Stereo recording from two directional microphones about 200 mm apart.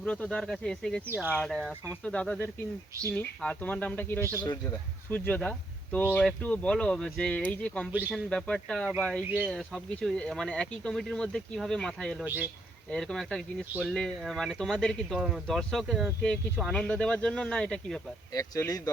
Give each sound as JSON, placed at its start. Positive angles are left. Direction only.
{"t": 0.0, "sound": "speech", "side_deg": 5}
{"t": 1.5, "sound": "speech", "side_deg": -15}
{"t": 1.9, "sound": "speech", "side_deg": 5}
{"t": 4.2, "sound": "speech", "side_deg": -15}
{"t": 4.4, "sound": "speech", "side_deg": 15}
{"t": 12.2, "sound": "speech", "side_deg": -10}
{"t": 12.9, "sound": "speech", "side_deg": 0}
{"t": 18.3, "sound": "speech", "side_deg": 15}